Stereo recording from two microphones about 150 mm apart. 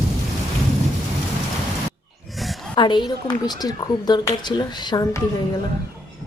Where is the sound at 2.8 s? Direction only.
30° left (ahead or behind).